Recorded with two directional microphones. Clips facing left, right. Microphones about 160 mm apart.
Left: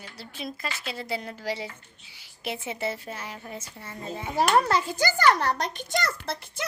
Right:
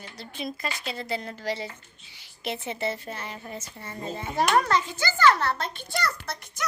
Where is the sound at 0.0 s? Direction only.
5° left (ahead or behind).